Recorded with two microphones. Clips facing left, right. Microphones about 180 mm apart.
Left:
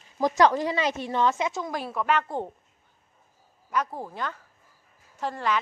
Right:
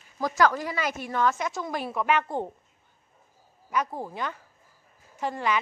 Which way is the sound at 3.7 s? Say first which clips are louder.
Even; 10° right (ahead or behind).